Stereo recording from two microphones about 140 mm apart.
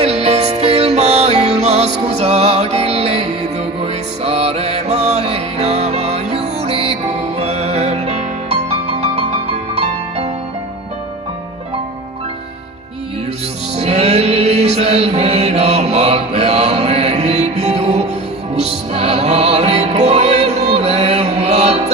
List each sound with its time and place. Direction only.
0.0 s music: 50° right (ahead or behind)
13.7 s music: 50° right (ahead or behind)